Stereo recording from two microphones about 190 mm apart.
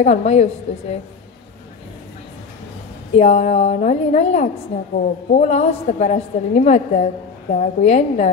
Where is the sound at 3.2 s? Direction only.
35° left (ahead or behind).